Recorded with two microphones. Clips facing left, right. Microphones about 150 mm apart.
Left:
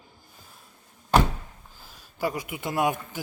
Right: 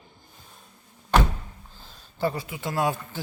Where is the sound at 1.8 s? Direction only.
10° left (ahead or behind).